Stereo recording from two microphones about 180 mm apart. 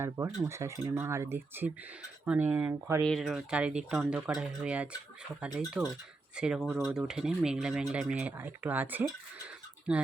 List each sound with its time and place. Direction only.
0.4 s speech: 15° right (ahead or behind)
3.1 s speech: centre (ahead or behind)